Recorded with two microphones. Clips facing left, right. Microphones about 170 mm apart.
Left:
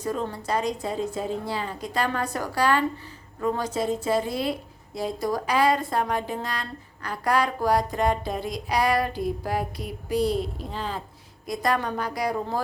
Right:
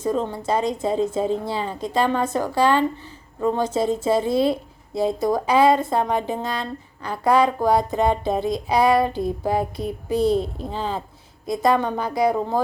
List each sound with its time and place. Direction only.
0.0 s a woman's voice: 25° right (ahead or behind)
11.4 s a woman's voice: 25° right (ahead or behind)